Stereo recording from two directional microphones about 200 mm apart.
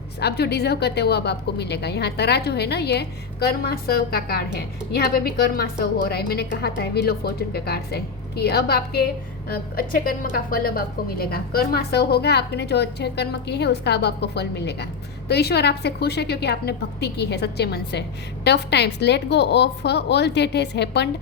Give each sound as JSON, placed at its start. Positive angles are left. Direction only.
{"t": 0.2, "sound": "a woman's voice", "side_deg": 55}